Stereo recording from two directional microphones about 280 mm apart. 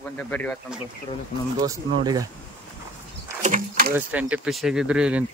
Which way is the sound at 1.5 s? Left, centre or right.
Centre.